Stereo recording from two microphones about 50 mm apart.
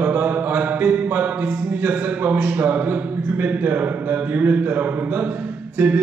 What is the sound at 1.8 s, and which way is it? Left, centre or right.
Music, right.